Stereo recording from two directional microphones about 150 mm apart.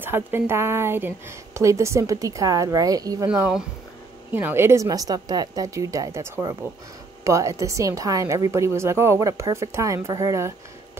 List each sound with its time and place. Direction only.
0.0 s speech: 15° right (ahead or behind)
3.3 s speech: 5° right (ahead or behind); by 10.5 s 20° right (ahead or behind)